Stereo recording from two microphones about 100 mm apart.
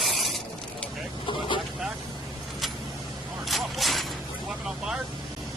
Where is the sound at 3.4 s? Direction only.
Centre (ahead or behind).